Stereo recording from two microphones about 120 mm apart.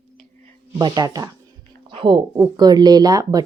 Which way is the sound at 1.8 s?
45° right (ahead or behind).